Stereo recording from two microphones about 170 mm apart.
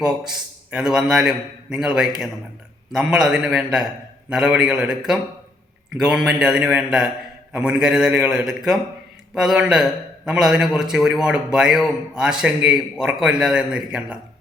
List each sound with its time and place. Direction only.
0.0 s a man's voice: 5° right (ahead or behind)